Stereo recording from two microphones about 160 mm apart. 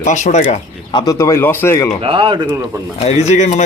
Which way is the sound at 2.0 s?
35° right (ahead or behind).